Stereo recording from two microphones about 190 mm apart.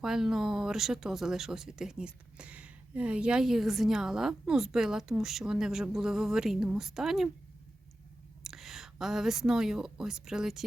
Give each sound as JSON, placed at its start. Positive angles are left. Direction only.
{"t": 0.0, "sound": "speech", "side_deg": 0}
{"t": 8.4, "sound": "speech", "side_deg": 0}